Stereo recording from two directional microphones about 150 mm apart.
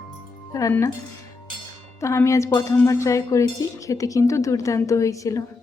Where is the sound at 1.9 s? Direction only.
20° left (ahead or behind).